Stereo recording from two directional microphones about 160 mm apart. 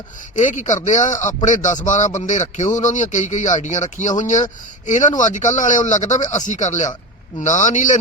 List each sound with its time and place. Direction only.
0.3 s speech: 50° left (ahead or behind)